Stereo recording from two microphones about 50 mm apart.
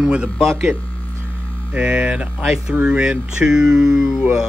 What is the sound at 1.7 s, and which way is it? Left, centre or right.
Speech, right.